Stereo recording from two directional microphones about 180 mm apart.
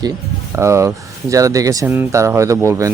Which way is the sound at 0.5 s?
15° right (ahead or behind).